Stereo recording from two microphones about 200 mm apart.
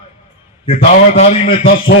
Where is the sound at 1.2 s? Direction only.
30° left (ahead or behind).